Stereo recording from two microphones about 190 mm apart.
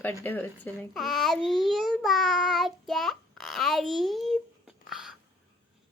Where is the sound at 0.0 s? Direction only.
10° left (ahead or behind).